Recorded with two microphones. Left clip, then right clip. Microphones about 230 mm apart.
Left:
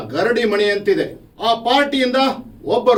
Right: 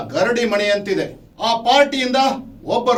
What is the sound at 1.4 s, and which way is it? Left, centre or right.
Speech, centre.